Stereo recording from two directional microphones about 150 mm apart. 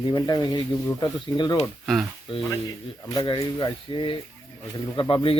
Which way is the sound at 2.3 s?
30° left (ahead or behind).